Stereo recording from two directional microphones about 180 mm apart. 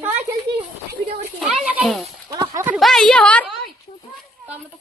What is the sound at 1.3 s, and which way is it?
Speech, centre (ahead or behind).